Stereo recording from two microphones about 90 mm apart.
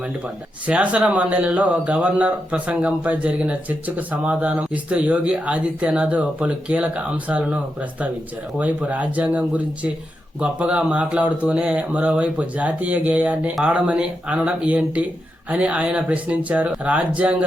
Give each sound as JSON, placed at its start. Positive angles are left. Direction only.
{"t": 0.6, "sound": "speech", "side_deg": -15}